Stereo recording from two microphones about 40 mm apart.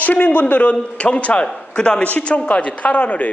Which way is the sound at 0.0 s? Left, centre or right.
Left.